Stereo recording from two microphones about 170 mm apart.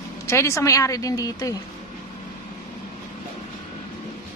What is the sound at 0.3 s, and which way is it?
A man's voice, 15° left (ahead or behind).